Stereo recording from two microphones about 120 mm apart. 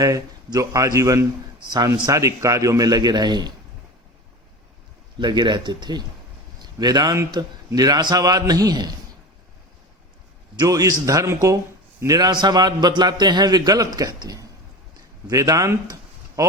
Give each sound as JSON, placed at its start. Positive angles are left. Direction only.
{"t": 0.0, "sound": "a man's voice", "side_deg": -30}
{"t": 5.1, "sound": "a man's voice", "side_deg": -35}
{"t": 10.6, "sound": "a man's voice", "side_deg": -30}